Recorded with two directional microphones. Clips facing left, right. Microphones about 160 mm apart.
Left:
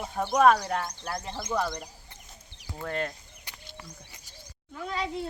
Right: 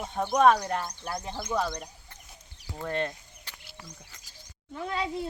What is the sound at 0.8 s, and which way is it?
Speech, 5° right (ahead or behind).